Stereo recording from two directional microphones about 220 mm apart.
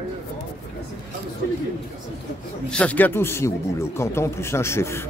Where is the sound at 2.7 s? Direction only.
5° left (ahead or behind).